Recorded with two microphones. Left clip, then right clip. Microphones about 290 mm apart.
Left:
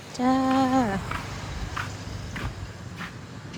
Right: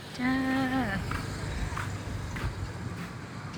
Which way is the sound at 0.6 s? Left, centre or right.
Right.